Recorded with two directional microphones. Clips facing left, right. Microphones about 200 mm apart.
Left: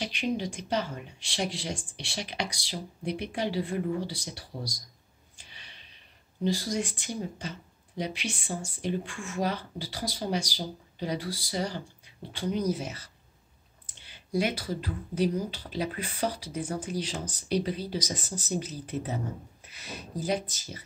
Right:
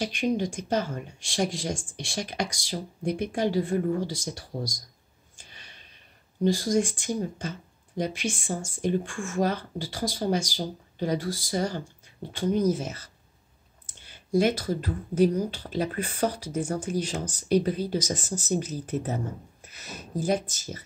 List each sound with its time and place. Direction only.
0.0 s speech: 45° right (ahead or behind)
5.3 s a sound: 45° right (ahead or behind)
6.4 s speech: 45° right (ahead or behind)